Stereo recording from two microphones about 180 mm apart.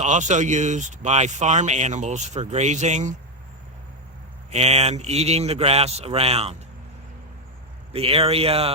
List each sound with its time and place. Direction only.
0.0 s speech: 40° right (ahead or behind)
4.5 s speech: 35° right (ahead or behind)
7.9 s speech: 35° right (ahead or behind)